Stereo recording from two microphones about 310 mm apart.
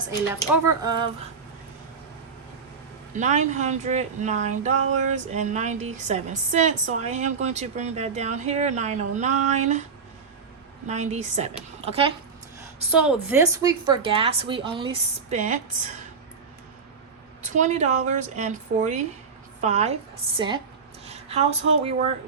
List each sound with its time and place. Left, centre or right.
0.1 s speech: centre
3.2 s speech: right
10.8 s speech: right
12.9 s speech: centre; by 15.6 s right
17.4 s speech: right
21.1 s a sound: centre
21.8 s speech: right